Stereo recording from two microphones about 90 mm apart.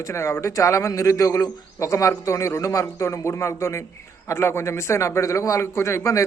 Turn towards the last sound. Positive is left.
turn(degrees=35)  # may be behind; listen again after turning